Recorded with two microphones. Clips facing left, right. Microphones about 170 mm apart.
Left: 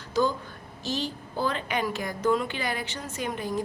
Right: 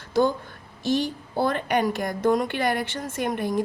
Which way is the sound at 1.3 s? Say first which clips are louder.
Right 6 dB; 50° right (ahead or behind).